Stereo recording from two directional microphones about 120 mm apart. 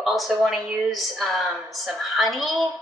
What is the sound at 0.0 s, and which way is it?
A woman's voice, centre (ahead or behind).